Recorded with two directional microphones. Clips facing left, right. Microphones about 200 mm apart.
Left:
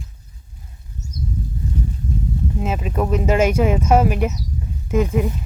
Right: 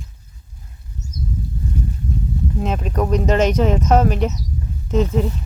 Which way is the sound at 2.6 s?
5° left (ahead or behind).